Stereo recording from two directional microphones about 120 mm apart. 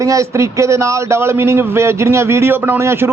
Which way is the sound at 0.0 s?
25° right (ahead or behind).